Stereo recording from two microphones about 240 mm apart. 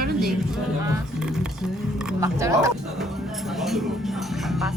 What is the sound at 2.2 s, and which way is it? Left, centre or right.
Speech, centre.